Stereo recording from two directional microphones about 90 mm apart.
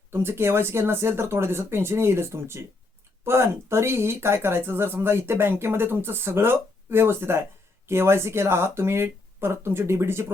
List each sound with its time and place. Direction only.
0.1 s speech: 25° right (ahead or behind)